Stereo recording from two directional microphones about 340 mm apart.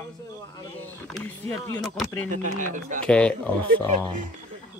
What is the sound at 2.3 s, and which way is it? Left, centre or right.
Speech, right.